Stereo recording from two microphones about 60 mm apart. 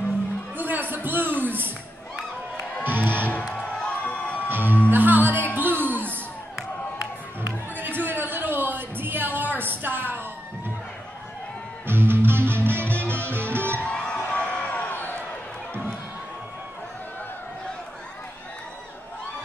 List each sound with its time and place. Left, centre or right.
0.6 s a sound: right
2.8 s music: right
3.6 s crowd: centre
4.5 s music: right
7.4 s music: right
9.6 s a sound: right
11.8 s music: right
14.1 s music: centre